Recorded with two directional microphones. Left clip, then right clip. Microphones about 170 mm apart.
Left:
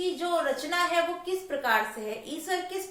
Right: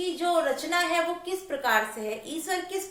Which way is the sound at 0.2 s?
20° right (ahead or behind).